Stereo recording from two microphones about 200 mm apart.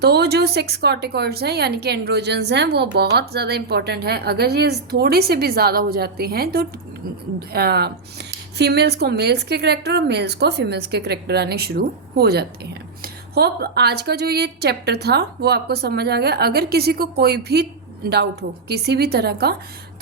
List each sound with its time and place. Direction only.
0.0 s a woman's voice: 55° right (ahead or behind)